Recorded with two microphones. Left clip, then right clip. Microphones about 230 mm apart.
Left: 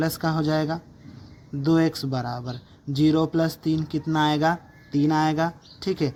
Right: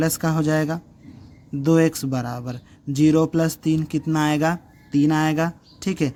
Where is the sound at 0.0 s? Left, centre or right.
Right.